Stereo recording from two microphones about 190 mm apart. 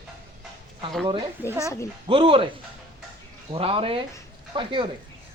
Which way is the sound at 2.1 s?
30° right (ahead or behind).